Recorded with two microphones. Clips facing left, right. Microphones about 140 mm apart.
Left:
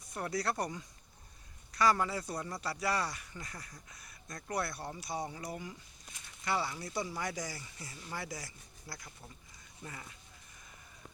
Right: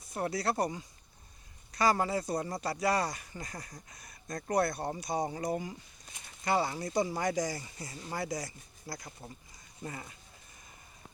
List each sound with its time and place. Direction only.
0.1 s speech: 30° right (ahead or behind)
1.7 s speech: 40° right (ahead or behind)